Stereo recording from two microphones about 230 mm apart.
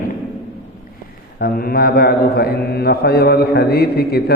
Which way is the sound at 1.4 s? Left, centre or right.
Left.